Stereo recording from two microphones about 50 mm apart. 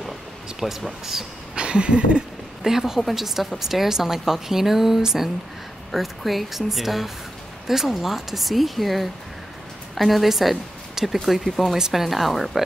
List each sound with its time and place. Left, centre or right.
0.6 s speech: centre
1.6 s a sound: right
2.6 s a woman's voice: centre